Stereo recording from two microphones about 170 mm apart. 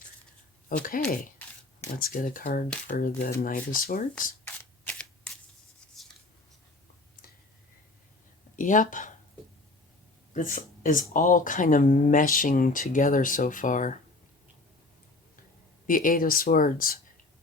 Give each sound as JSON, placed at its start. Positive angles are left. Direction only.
{"t": 0.8, "sound": "speech", "side_deg": 55}
{"t": 8.5, "sound": "speech", "side_deg": 50}
{"t": 10.3, "sound": "speech", "side_deg": 50}
{"t": 15.9, "sound": "speech", "side_deg": 55}